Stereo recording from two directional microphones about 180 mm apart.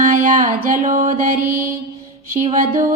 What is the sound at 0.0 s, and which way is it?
Music, 45° right (ahead or behind).